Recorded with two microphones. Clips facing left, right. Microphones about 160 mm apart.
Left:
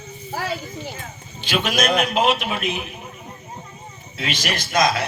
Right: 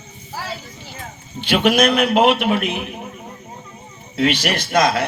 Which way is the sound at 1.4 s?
60° right (ahead or behind).